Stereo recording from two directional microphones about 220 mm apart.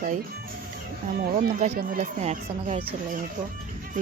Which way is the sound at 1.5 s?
35° right (ahead or behind).